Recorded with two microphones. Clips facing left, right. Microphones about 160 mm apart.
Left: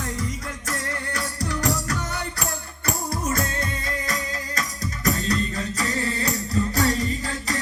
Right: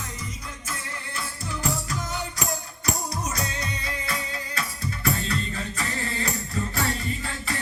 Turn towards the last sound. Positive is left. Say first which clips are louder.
# left 3 dB
turn(degrees=40)  # may be behind; listen again after turning